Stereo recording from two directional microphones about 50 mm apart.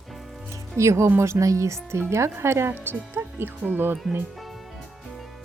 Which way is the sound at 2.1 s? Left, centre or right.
Right.